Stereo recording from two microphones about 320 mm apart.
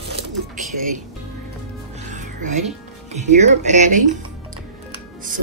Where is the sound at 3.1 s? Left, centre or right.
Right.